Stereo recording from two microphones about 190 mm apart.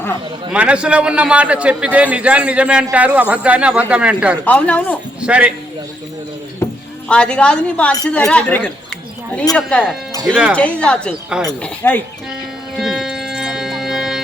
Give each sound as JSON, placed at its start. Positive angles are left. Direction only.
{"t": 0.5, "sound": "a man's voice", "side_deg": -5}
{"t": 4.4, "sound": "speech", "side_deg": 5}
{"t": 5.2, "sound": "speech", "side_deg": -5}
{"t": 7.1, "sound": "speech", "side_deg": 5}
{"t": 10.5, "sound": "speech", "side_deg": 5}
{"t": 12.7, "sound": "music", "side_deg": 0}